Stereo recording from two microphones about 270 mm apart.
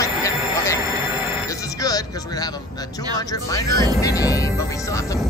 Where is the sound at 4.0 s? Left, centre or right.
Centre.